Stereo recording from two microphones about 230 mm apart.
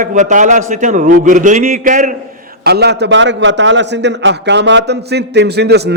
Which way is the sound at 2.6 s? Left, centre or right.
Right.